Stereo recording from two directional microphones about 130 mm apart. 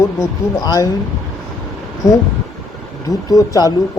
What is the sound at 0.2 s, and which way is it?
Speech, 30° left (ahead or behind).